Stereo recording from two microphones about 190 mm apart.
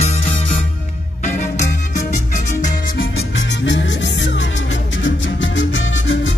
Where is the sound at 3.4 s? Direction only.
70° left (ahead or behind).